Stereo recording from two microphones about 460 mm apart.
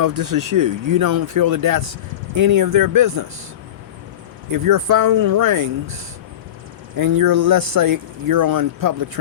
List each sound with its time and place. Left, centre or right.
0.0 s speech: right
4.5 s speech: right
6.9 s speech: right